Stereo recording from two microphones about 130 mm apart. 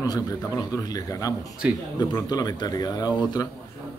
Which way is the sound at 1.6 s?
10° right (ahead or behind).